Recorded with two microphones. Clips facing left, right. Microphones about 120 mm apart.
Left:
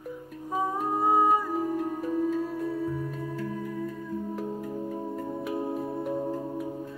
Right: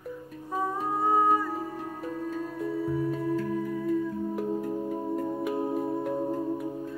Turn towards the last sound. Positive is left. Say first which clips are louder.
# right 2 dB
turn(degrees=0)  # may be behind; listen again after turning